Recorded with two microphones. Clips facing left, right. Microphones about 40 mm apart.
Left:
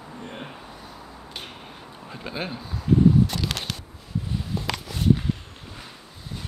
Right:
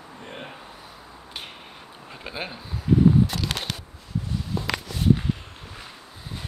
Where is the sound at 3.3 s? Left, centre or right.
Centre.